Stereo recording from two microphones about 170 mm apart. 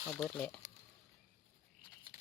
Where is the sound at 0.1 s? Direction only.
5° left (ahead or behind).